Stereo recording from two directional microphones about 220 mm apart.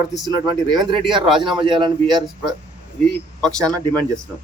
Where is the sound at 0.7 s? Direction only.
20° right (ahead or behind).